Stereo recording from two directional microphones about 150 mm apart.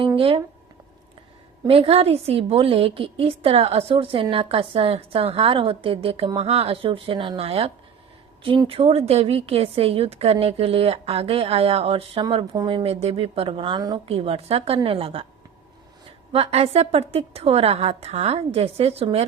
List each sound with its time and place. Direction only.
0.2 s a woman's voice: 35° right (ahead or behind)
1.6 s a woman's voice: 40° right (ahead or behind)
14.1 s a woman's voice: 40° right (ahead or behind)
16.3 s a woman's voice: 45° right (ahead or behind)